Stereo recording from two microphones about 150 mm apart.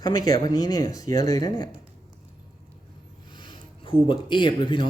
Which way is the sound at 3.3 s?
30° left (ahead or behind).